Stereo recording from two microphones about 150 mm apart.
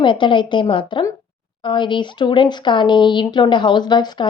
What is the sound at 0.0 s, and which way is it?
Speech, 35° left (ahead or behind).